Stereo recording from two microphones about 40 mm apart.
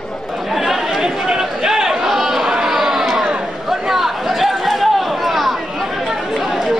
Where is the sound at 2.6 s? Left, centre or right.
Centre.